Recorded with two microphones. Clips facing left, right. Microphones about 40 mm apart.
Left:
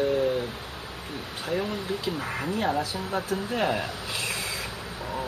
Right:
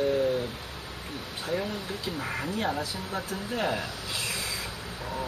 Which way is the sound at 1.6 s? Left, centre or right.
Left.